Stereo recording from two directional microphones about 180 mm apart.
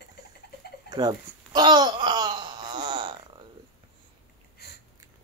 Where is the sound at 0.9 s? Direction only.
25° right (ahead or behind).